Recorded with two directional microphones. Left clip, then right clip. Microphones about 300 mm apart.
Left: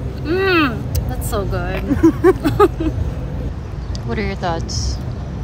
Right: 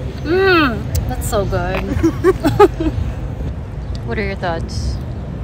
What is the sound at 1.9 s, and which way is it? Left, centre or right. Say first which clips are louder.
Speech: left 4 dB; left.